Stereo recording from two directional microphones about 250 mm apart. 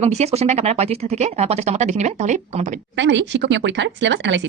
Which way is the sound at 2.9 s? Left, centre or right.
Right.